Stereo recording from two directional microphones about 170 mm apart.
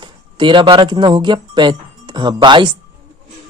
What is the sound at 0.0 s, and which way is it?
A man's voice, 30° right (ahead or behind).